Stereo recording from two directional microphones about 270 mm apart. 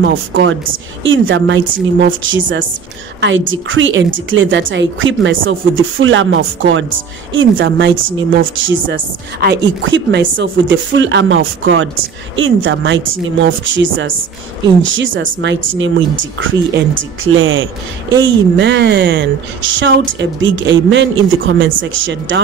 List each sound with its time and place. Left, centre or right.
0.0 s a woman's voice: right
3.2 s a woman's voice: right